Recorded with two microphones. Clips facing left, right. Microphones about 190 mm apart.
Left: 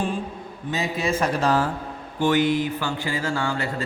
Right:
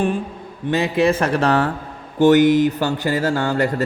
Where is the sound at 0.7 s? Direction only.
65° right (ahead or behind).